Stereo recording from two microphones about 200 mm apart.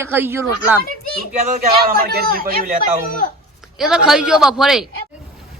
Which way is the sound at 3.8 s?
Centre (ahead or behind).